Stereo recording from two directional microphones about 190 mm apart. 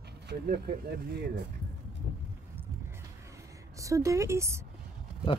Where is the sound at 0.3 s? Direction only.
55° right (ahead or behind).